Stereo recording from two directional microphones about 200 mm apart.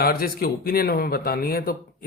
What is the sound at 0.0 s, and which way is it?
Speech, 50° left (ahead or behind).